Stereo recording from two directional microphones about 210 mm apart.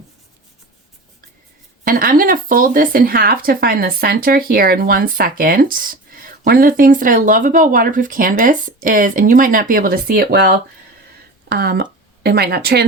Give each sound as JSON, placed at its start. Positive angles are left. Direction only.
{"t": 1.8, "sound": "speech", "side_deg": -45}